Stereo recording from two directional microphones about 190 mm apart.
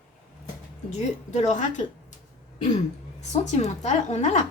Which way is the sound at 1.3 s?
40° left (ahead or behind).